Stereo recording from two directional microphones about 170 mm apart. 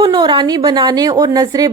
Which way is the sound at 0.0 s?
25° right (ahead or behind).